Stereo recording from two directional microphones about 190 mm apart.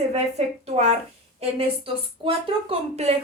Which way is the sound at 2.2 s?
30° right (ahead or behind).